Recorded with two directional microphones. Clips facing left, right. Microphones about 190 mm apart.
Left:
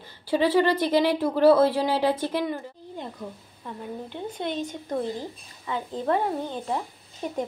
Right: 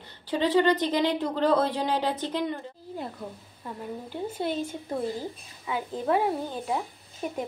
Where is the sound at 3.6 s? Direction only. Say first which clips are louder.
Left 1 dB; 5° right (ahead or behind).